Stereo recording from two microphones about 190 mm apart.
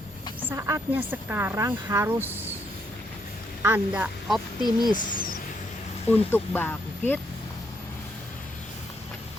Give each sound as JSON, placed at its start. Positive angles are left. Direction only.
{"t": 0.5, "sound": "speech", "side_deg": -10}
{"t": 3.6, "sound": "speech", "side_deg": -10}
{"t": 4.6, "sound": "speech", "side_deg": 20}
{"t": 4.9, "sound": "speech", "side_deg": 50}
{"t": 6.1, "sound": "speech", "side_deg": 10}